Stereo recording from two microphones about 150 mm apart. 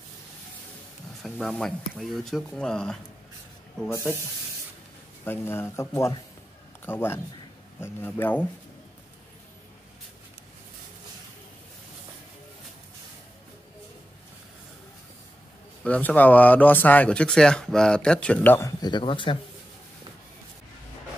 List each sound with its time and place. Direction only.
1.2 s speech: centre (ahead or behind)
5.2 s speech: 15° left (ahead or behind)
15.8 s speech: 10° left (ahead or behind)
18.8 s speech: 30° left (ahead or behind)